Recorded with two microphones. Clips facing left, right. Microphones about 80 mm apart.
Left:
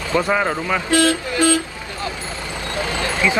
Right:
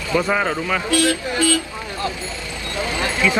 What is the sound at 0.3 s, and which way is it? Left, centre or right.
Speech, centre.